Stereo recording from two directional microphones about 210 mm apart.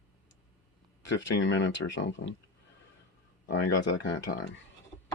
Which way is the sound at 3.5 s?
60° left (ahead or behind).